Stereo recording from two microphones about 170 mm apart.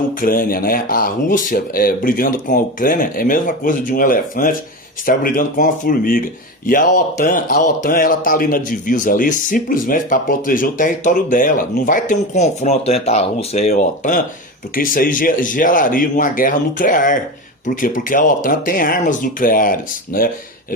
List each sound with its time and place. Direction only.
0.2 s speech: 55° left (ahead or behind)